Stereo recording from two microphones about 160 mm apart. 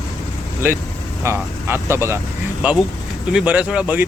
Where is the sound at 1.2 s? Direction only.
15° right (ahead or behind).